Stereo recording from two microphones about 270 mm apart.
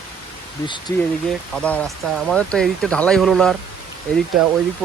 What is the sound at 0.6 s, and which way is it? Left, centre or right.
Speech, centre.